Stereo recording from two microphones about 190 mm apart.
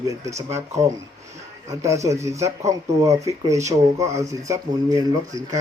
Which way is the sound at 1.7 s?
15° right (ahead or behind).